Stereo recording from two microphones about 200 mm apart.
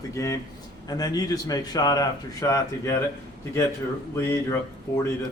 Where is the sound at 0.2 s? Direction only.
15° left (ahead or behind).